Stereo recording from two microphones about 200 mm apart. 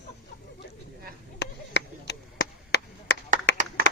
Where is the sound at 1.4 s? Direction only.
60° left (ahead or behind).